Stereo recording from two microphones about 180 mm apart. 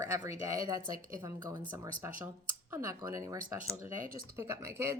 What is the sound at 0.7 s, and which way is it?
Speech, 50° right (ahead or behind).